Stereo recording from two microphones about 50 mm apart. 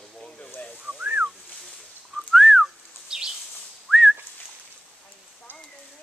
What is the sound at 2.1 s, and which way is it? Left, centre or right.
Whistling, centre.